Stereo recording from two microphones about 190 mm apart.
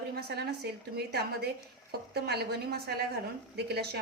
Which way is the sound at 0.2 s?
60° right (ahead or behind).